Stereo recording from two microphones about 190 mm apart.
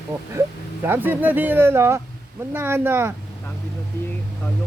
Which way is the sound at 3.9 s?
15° left (ahead or behind).